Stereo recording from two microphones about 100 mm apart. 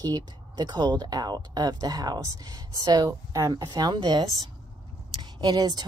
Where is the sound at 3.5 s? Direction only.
45° right (ahead or behind).